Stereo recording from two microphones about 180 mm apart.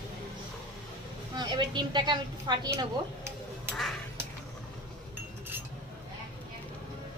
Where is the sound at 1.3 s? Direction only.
25° right (ahead or behind).